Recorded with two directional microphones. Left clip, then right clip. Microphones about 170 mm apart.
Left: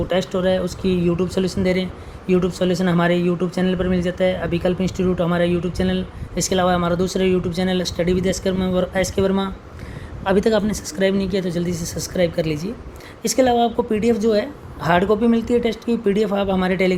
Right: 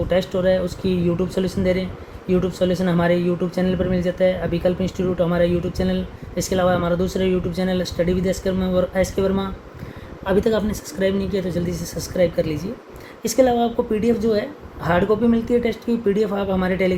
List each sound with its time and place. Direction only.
0.3 s speech: 35° left (ahead or behind)